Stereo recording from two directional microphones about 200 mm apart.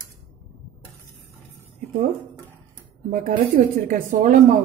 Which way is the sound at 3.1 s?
40° right (ahead or behind).